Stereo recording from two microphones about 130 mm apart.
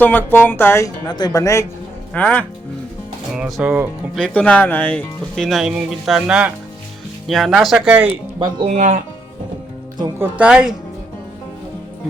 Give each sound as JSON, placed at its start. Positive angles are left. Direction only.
{"t": 0.0, "sound": "speech", "side_deg": 15}
{"t": 1.0, "sound": "speech", "side_deg": 35}
{"t": 2.1, "sound": "speech", "side_deg": 10}
{"t": 3.3, "sound": "speech", "side_deg": -5}
{"t": 4.1, "sound": "speech", "side_deg": 10}
{"t": 8.4, "sound": "speech", "side_deg": -35}
{"t": 8.6, "sound": "speech", "side_deg": -70}
{"t": 10.2, "sound": "a woman's voice", "side_deg": -10}